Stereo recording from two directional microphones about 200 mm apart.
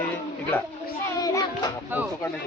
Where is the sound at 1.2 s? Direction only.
20° left (ahead or behind).